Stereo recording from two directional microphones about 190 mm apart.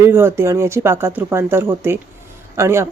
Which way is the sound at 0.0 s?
10° right (ahead or behind).